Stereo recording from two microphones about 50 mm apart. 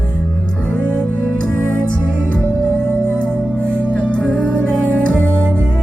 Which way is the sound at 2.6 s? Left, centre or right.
Left.